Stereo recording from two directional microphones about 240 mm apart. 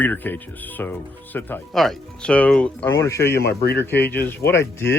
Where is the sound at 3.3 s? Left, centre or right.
Left.